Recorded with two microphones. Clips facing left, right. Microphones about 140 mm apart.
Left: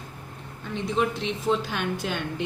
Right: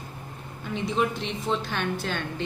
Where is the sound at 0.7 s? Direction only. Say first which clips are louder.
Even; centre (ahead or behind).